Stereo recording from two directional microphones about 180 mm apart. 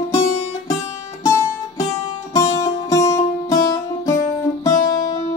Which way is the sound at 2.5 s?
15° left (ahead or behind).